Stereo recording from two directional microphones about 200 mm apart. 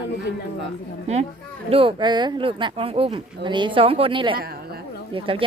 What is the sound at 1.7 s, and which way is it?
Speech, 25° right (ahead or behind).